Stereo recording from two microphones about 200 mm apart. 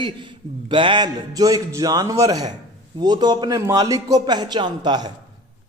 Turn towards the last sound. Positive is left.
turn(degrees=-20)  # may be behind; listen again after turning